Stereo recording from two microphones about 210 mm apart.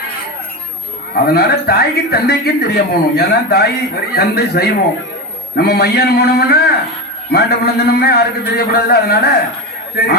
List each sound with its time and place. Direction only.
1.1 s a man's voice: 45° left (ahead or behind)